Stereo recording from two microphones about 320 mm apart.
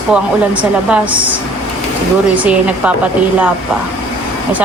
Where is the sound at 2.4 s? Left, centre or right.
Centre.